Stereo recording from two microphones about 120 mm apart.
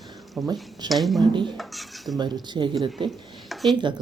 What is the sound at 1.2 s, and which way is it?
Speech, 40° right (ahead or behind).